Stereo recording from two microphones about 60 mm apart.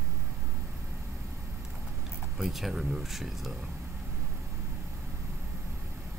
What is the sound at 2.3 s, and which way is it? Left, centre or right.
Speech, centre.